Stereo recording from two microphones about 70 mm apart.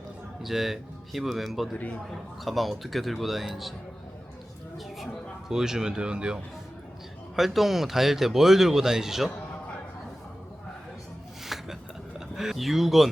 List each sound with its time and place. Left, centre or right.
0.4 s speech: centre
5.5 s speech: centre
7.3 s speech: centre
11.4 s a sound: centre
12.4 s speech: centre